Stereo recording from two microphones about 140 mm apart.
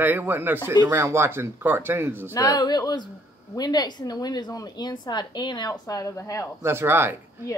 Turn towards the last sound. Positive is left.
turn(degrees=-15)  # may be behind; listen again after turning